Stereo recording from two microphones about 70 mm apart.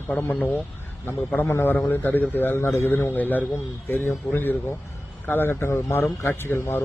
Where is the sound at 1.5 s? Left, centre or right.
Left.